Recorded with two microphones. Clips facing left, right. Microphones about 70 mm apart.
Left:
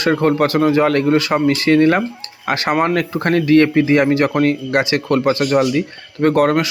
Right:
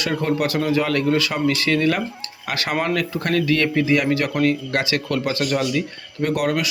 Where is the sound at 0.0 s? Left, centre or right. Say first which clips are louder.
Left 7 dB; left.